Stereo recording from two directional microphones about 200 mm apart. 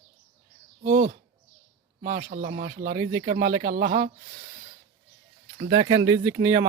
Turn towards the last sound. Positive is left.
turn(degrees=-20)  # may be behind; listen again after turning